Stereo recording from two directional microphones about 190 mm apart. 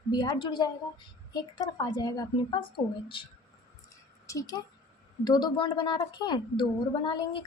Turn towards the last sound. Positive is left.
turn(degrees=25)  # may be behind; listen again after turning